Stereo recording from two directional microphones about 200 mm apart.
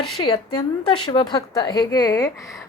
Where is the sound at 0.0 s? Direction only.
25° left (ahead or behind).